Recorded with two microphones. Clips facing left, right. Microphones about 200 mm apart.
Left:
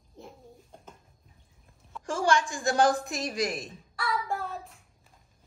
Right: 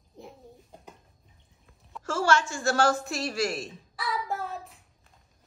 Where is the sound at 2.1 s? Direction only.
15° left (ahead or behind).